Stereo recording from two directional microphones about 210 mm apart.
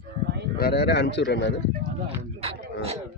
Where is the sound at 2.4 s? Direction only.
30° right (ahead or behind).